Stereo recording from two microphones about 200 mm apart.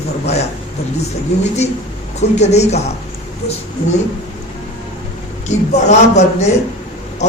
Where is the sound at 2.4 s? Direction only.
35° left (ahead or behind).